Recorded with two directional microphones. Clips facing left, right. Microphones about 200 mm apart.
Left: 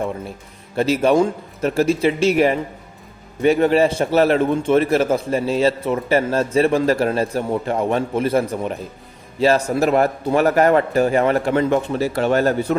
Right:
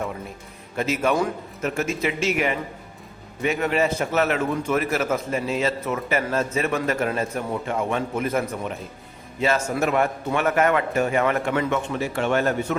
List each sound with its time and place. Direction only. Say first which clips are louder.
0.8 s a man's voice: left 7 dB; 30° left (ahead or behind)